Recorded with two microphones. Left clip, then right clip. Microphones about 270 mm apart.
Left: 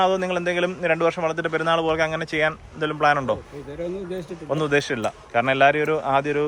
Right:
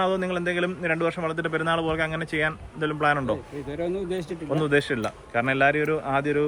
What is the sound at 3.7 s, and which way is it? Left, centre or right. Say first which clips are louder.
A man's voice: right 1 dB; centre.